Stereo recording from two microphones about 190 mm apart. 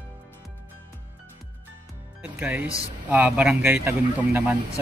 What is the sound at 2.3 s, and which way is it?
Speech, 10° right (ahead or behind).